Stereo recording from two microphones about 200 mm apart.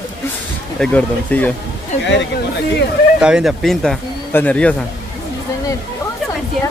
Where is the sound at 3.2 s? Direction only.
5° right (ahead or behind).